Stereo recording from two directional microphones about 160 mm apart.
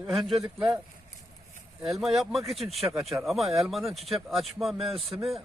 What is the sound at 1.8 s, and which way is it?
Speech, centre (ahead or behind).